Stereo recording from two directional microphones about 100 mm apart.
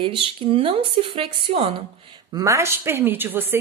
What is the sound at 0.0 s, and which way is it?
A woman's voice, 60° right (ahead or behind).